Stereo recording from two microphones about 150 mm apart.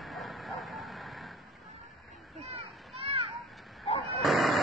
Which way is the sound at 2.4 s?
40° right (ahead or behind).